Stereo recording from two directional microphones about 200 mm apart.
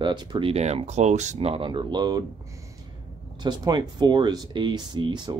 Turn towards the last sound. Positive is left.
turn(degrees=-20)  # may be behind; listen again after turning